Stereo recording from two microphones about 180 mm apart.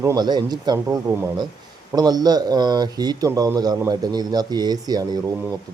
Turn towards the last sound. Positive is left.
turn(degrees=-20)  # may be behind; listen again after turning